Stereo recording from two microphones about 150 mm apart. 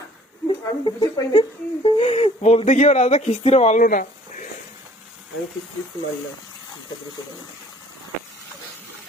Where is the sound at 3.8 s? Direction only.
65° left (ahead or behind).